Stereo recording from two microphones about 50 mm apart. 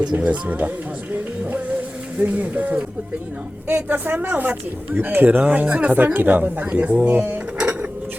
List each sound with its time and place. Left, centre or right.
0.2 s speech: right
1.1 s music: right
2.1 s speech: right
5.5 s speech: right